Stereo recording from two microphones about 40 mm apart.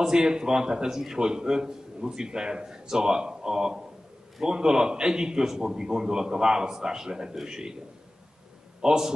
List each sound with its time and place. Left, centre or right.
0.0 s a man's voice: centre
8.8 s a man's voice: centre